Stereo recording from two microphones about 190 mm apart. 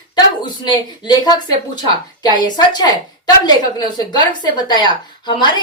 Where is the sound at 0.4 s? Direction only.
25° left (ahead or behind).